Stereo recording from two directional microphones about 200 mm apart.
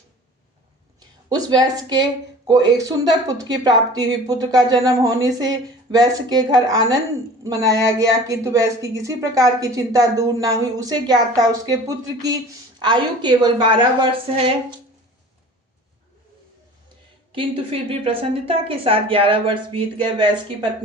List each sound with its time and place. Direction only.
1.3 s a woman's voice: 20° right (ahead or behind)
17.3 s speech: 25° right (ahead or behind)